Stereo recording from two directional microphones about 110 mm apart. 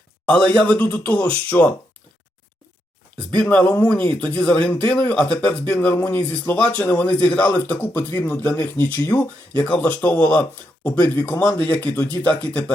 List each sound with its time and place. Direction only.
0.3 s speech: 10° left (ahead or behind)
3.3 s speech: 10° left (ahead or behind)